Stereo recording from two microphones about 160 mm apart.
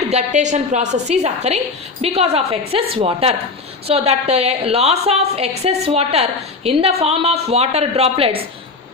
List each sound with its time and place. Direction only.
0.1 s a woman's voice: 45° right (ahead or behind)